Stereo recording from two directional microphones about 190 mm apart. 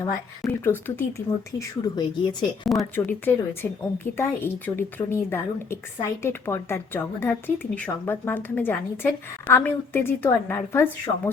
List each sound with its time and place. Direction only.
0.0 s speech: 10° left (ahead or behind)
1.5 s speech: 20° left (ahead or behind)
2.6 s speech: 5° left (ahead or behind)